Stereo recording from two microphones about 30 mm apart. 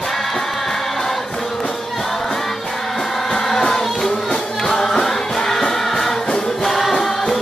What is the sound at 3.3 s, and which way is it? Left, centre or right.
Music, centre.